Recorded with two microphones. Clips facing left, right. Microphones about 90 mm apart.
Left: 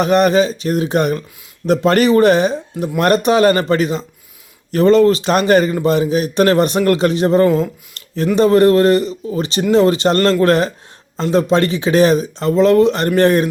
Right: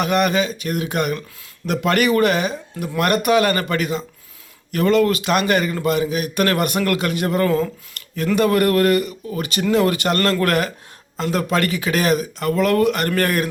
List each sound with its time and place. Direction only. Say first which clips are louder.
0.0 s speech: left 6 dB; 35° left (ahead or behind)